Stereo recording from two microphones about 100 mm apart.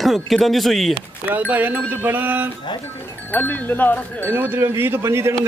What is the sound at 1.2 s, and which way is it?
Speech, 15° right (ahead or behind).